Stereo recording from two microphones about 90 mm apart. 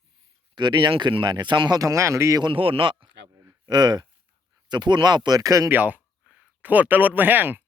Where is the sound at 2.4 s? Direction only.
80° right.